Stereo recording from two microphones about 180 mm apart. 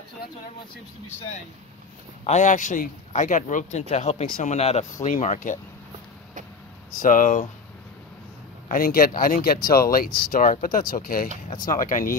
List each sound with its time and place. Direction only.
2.2 s speech: 40° left (ahead or behind)
7.0 s speech: 45° left (ahead or behind)
8.6 s speech: 50° left (ahead or behind)